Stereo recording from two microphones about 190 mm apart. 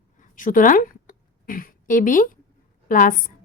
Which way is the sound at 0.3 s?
45° left (ahead or behind).